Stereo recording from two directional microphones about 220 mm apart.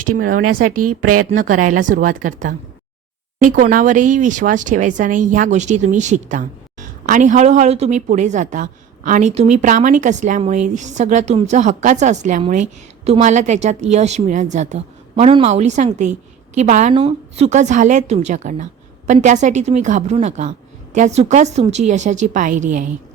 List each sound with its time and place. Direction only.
0.0 s speech: 40° right (ahead or behind)
0.8 s a woman's voice: 90° right
1.2 s speech: 40° right (ahead or behind)